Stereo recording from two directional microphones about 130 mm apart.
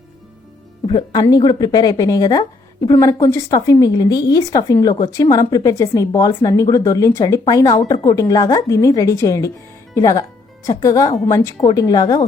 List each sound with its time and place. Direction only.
0.9 s a woman's voice: 35° left (ahead or behind)